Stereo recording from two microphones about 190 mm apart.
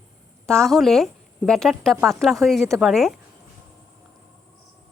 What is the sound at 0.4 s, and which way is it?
Speech, 5° left (ahead or behind).